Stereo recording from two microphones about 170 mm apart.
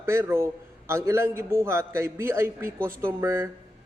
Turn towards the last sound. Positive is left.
turn(degrees=-15)  # may be behind; listen again after turning